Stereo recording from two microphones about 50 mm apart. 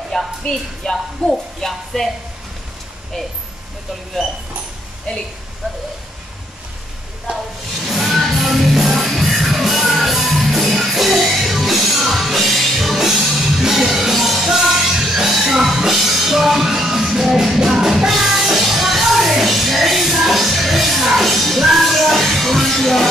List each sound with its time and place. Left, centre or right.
0.4 s speech: centre
1.3 s speech: centre
7.8 s music: centre